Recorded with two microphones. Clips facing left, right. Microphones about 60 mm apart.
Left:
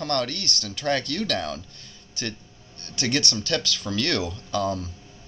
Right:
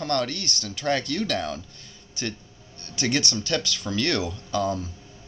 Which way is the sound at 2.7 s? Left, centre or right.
Centre.